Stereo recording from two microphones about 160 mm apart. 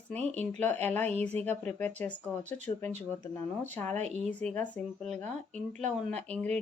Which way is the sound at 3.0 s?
10° left (ahead or behind).